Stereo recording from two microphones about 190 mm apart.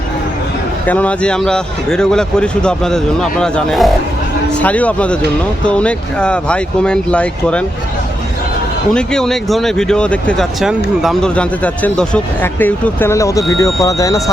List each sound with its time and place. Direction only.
0.9 s speech: 10° left (ahead or behind)
8.9 s speech: 5° left (ahead or behind)